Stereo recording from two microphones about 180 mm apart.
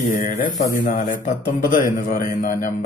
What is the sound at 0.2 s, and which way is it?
A man's voice, 45° left (ahead or behind).